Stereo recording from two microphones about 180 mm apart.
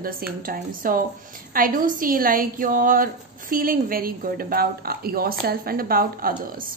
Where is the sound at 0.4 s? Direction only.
50° right (ahead or behind).